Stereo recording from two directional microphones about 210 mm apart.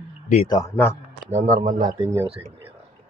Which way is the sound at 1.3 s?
40° right (ahead or behind).